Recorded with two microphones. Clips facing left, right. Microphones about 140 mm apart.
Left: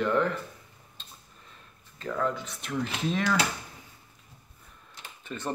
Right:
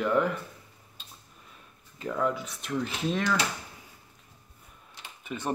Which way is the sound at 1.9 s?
10° right (ahead or behind).